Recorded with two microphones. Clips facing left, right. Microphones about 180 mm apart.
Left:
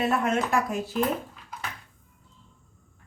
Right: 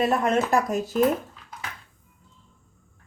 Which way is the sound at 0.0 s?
40° right (ahead or behind).